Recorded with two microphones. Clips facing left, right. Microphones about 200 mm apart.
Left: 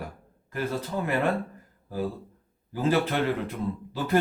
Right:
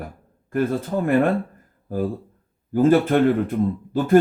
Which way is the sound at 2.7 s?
50° right (ahead or behind).